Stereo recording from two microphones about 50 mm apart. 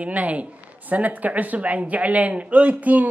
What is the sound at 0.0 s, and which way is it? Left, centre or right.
Speech, right.